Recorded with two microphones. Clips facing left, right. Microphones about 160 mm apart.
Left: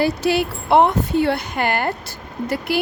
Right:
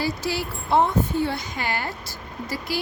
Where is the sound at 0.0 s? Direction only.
60° left (ahead or behind).